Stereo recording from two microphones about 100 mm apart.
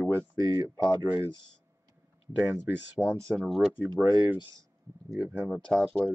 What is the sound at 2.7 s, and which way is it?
Speech, 10° right (ahead or behind).